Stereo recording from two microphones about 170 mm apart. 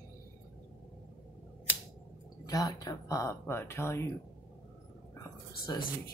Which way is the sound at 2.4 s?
20° left (ahead or behind).